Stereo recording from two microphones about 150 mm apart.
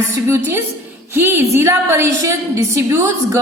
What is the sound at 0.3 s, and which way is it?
A woman's voice, 15° right (ahead or behind).